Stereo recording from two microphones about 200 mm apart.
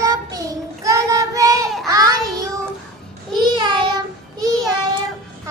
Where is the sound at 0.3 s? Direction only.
15° right (ahead or behind).